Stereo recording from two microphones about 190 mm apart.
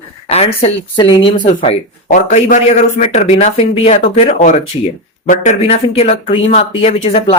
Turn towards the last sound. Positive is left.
turn(degrees=30)  # may be behind; listen again after turning